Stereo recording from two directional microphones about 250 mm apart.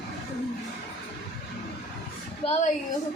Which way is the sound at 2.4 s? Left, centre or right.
Left.